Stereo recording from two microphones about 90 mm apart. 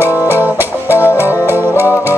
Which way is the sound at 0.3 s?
25° right (ahead or behind).